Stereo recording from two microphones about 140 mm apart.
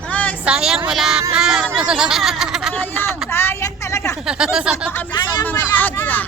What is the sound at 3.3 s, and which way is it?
Speech, 15° left (ahead or behind).